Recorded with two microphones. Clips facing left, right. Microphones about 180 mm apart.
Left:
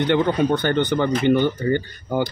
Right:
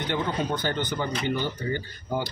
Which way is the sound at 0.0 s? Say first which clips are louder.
Left 9 dB; 65° left (ahead or behind).